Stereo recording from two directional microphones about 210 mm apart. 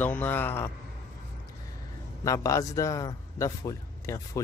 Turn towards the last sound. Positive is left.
turn(degrees=15)  # may be behind; listen again after turning